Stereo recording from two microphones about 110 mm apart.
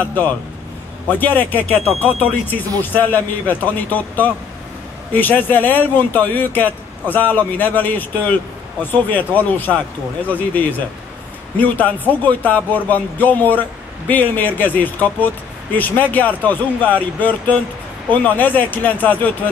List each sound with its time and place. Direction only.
0.0 s a man's voice: 15° left (ahead or behind)